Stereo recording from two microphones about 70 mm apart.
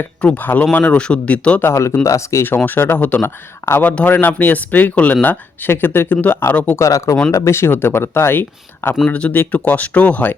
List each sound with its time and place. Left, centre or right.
0.2 s speech: left
1.6 s speech: left
2.6 s speech: left
6.7 s speech: left
9.0 s speech: centre